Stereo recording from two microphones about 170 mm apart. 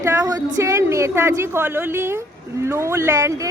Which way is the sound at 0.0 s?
20° right (ahead or behind).